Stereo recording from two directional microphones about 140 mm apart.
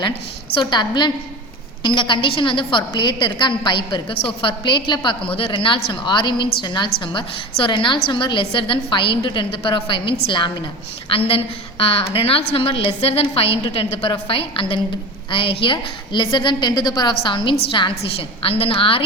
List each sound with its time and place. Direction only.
0.6 s a woman's voice: 30° left (ahead or behind)